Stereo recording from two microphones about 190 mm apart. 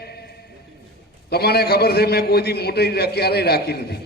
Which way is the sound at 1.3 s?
55° left (ahead or behind).